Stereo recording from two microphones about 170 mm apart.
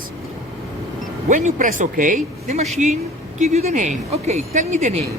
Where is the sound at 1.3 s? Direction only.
45° right (ahead or behind).